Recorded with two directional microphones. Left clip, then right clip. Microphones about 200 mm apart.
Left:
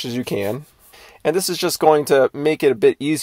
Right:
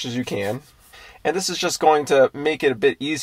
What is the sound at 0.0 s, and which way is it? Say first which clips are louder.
Speech: left 2 dB; 45° left (ahead or behind).